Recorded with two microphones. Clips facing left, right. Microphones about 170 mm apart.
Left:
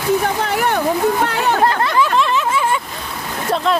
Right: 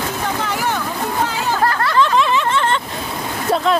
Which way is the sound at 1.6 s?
20° left (ahead or behind).